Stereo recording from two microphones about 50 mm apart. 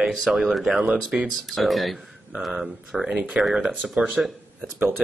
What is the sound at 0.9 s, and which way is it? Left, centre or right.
Speech, centre.